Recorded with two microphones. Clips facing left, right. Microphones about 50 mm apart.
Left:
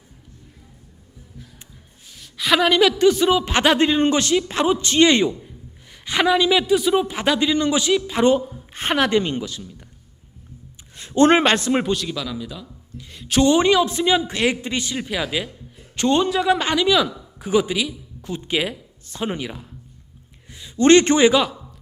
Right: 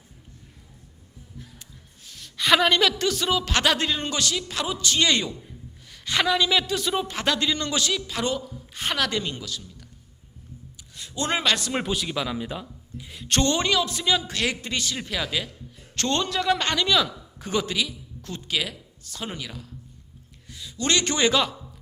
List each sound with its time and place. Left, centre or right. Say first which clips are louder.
2.0 s a man's voice: left 1 dB; centre; by 9.8 s left
10.9 s a man's voice: left 12 dB; left
11.9 s speech: left 5 dB; centre
12.1 s speech: even; right
13.0 s speech: left 6 dB; centre
13.5 s a man's voice: left 7 dB; centre
18.5 s a man's voice: left 5 dB; left
21.2 s a man's voice: left 5 dB; centre